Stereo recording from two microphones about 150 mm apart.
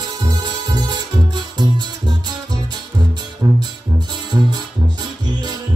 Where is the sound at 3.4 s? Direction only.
25° right (ahead or behind).